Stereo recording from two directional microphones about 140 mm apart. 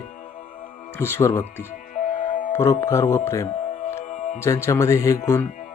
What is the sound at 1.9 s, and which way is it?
Music, 65° left (ahead or behind).